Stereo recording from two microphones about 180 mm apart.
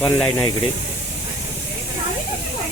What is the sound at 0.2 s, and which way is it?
Speech, 15° left (ahead or behind).